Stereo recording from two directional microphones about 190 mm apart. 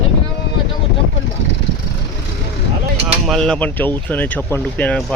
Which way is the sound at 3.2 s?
5° left (ahead or behind).